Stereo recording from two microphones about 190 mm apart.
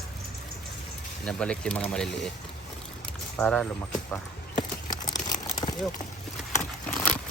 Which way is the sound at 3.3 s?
5° left (ahead or behind).